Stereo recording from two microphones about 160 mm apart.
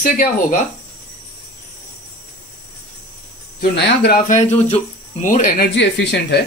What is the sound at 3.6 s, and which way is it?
Speech, 65° left (ahead or behind).